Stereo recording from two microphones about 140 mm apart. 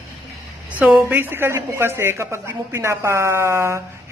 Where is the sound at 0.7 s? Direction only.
10° right (ahead or behind).